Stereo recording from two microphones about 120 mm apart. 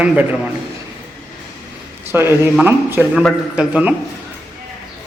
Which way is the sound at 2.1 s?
20° right (ahead or behind).